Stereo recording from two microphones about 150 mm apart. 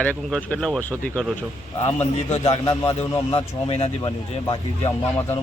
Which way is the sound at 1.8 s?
40° left (ahead or behind).